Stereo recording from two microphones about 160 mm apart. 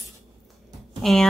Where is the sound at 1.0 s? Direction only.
Centre (ahead or behind).